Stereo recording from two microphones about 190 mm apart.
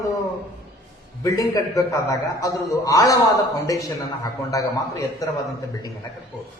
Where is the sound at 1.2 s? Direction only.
15° left (ahead or behind).